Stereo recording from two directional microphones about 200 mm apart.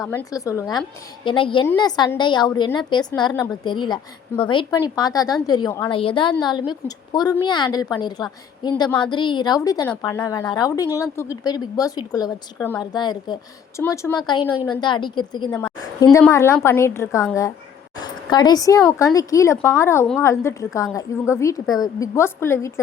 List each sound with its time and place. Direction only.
0.0 s a woman's voice: 10° left (ahead or behind)